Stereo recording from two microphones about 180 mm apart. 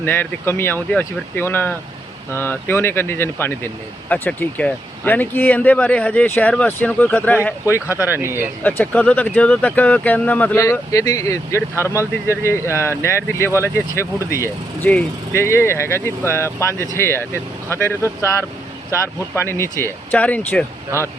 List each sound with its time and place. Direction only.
0.0 s speech: 10° left (ahead or behind)
7.7 s speech: 10° right (ahead or behind)
8.6 s speech: 10° left (ahead or behind)